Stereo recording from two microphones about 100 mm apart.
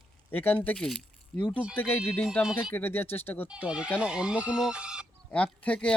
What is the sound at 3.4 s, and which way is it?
Speech, 10° right (ahead or behind).